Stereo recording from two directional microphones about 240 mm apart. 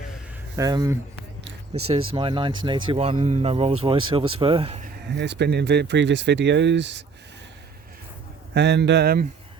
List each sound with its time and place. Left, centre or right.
0.5 s speech: centre
1.5 s a sound: right
2.1 s speech: right
5.1 s speech: right
8.5 s speech: right